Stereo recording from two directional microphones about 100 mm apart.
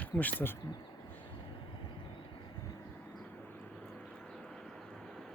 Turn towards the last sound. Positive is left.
turn(degrees=5)  # may be behind; listen again after turning